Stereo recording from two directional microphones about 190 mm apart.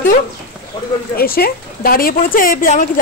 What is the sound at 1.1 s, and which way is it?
A woman's voice, 50° left (ahead or behind).